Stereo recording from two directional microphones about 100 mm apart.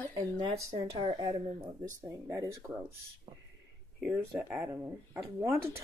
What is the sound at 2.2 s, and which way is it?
Speech, 30° right (ahead or behind).